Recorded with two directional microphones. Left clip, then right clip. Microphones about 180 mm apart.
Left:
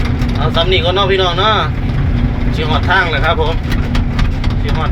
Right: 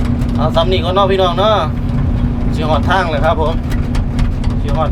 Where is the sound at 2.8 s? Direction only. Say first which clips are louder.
Left 3 dB; 15° right (ahead or behind).